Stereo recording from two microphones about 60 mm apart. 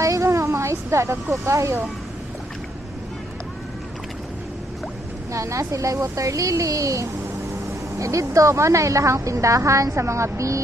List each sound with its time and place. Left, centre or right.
0.0 s a sound: right
1.4 s a woman's voice: right
5.3 s a woman's voice: right